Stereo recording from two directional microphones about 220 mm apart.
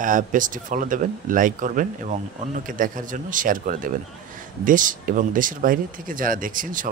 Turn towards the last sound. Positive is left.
turn(degrees=-40)  # may be behind; listen again after turning